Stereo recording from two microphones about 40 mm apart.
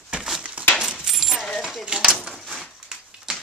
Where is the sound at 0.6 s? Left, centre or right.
Right.